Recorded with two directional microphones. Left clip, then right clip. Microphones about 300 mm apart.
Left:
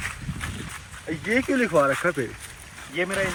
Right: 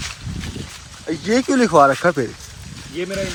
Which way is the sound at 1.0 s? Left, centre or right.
Centre.